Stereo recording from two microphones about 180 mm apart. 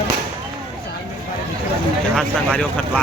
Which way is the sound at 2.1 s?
5° left (ahead or behind).